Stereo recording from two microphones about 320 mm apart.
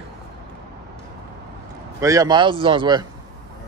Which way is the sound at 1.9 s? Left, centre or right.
Centre.